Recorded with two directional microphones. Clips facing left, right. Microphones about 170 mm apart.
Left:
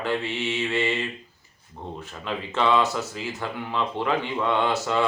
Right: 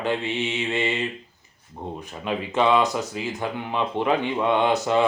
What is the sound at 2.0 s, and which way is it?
Speech, 15° right (ahead or behind).